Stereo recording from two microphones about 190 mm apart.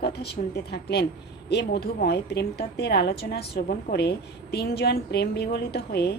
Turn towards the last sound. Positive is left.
turn(degrees=60)  # may be behind; listen again after turning